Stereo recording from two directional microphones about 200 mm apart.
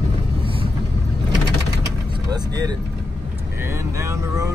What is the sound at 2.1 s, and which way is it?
Vehicle, 20° right (ahead or behind).